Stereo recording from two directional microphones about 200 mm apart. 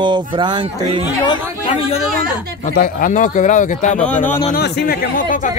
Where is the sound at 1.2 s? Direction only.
30° left (ahead or behind).